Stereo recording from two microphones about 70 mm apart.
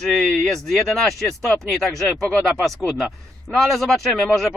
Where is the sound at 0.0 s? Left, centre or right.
Centre.